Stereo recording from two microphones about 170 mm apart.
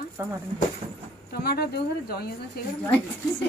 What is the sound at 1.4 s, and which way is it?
Speech, 65° left (ahead or behind).